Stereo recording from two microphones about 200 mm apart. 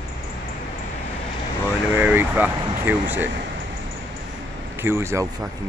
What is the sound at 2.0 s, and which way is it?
Speech, 10° right (ahead or behind).